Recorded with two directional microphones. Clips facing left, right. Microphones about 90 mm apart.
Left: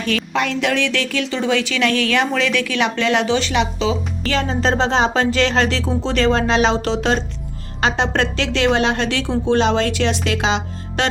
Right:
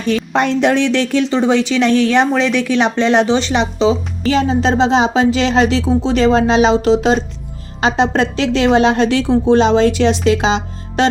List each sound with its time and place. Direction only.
0.3 s speech: 30° right (ahead or behind)
4.3 s speech: 15° right (ahead or behind)